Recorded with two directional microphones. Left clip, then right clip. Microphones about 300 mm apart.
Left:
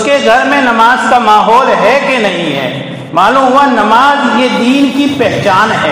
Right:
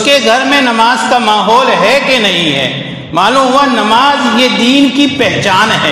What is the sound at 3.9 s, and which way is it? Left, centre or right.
A man's voice, right.